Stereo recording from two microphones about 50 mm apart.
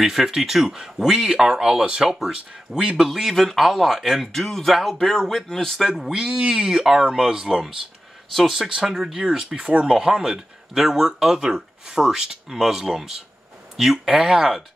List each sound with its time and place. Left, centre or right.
0.0 s speech: centre
3.1 s speech: centre
5.9 s speech: centre
8.5 s speech: centre
9.6 s speech: right
9.8 s speech: centre